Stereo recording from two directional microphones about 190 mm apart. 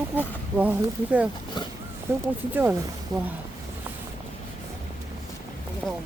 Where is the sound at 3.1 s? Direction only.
20° right (ahead or behind).